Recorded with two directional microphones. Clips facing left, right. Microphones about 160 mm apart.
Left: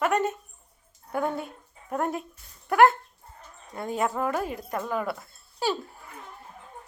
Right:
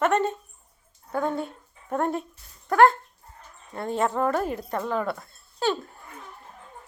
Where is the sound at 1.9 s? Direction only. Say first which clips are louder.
Right 2 dB; 5° left (ahead or behind).